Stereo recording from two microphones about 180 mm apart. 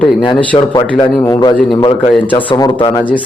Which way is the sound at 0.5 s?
25° left (ahead or behind).